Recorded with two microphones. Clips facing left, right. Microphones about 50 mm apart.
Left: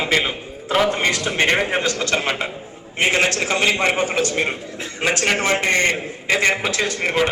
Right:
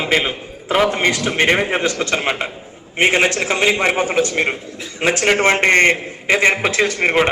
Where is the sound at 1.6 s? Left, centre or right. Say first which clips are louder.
Right 2 dB; right.